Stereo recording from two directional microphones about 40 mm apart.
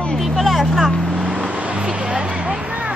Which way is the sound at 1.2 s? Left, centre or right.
Centre.